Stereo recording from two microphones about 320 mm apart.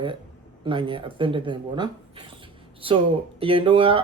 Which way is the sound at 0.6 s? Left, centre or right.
Centre.